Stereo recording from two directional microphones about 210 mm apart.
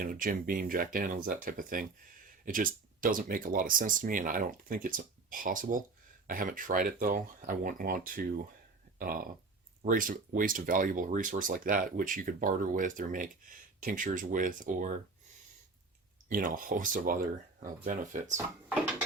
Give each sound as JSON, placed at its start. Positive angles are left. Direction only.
{"t": 0.0, "sound": "speech", "side_deg": -40}
{"t": 9.8, "sound": "speech", "side_deg": -40}
{"t": 16.3, "sound": "speech", "side_deg": -40}